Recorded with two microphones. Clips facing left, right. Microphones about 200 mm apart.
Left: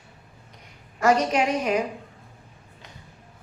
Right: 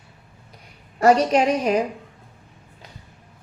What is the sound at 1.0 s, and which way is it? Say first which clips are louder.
Speech: right 4 dB; 35° right (ahead or behind).